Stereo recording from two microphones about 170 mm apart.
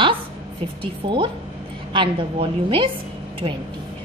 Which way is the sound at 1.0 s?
30° right (ahead or behind).